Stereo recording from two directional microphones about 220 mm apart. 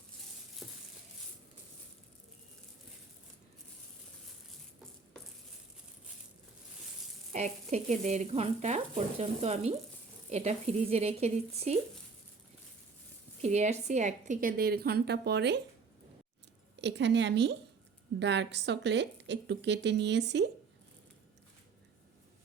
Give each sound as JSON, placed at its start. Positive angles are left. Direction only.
{"t": 0.6, "sound": "a sound", "side_deg": 0}
{"t": 7.3, "sound": "speech", "side_deg": -30}
{"t": 13.4, "sound": "a woman's voice", "side_deg": -30}
{"t": 16.7, "sound": "a woman's voice", "side_deg": -50}